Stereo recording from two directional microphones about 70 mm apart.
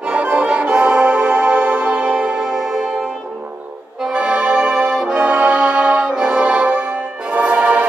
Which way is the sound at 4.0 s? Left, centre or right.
Centre.